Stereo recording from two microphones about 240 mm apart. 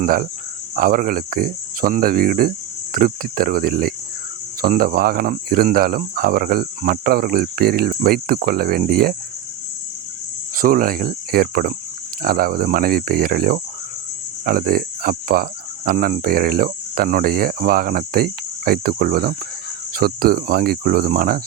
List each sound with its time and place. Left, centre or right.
0.0 s speech: right
10.6 s speech: right